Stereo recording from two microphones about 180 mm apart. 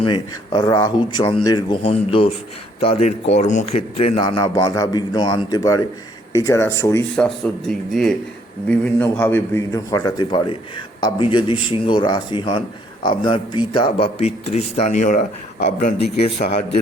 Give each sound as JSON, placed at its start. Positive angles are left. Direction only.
{"t": 0.0, "sound": "a man's voice", "side_deg": 25}
{"t": 7.2, "sound": "a man's voice", "side_deg": 5}